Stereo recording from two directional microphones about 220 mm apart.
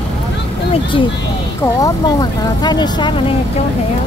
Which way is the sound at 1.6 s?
15° left (ahead or behind).